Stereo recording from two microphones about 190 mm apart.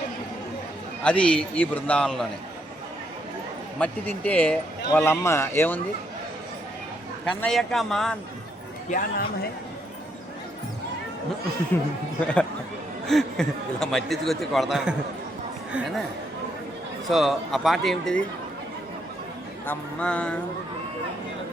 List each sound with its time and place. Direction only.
1.0 s speech: 5° left (ahead or behind)
3.8 s speech: 5° left (ahead or behind)
7.4 s speech: centre (ahead or behind)
8.9 s speech: 50° left (ahead or behind)
11.7 s speech: 10° left (ahead or behind)
13.1 s speech: centre (ahead or behind)
17.1 s speech: centre (ahead or behind)
19.6 s speech: 5° left (ahead or behind)